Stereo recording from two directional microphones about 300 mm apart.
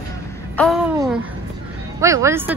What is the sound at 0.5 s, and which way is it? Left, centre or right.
A woman's voice, centre.